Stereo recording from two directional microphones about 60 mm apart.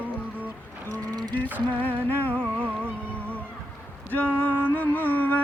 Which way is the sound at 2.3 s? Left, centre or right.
Right.